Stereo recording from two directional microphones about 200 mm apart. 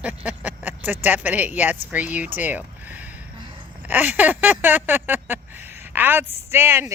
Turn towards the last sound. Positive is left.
turn(degrees=-10)  # may be behind; listen again after turning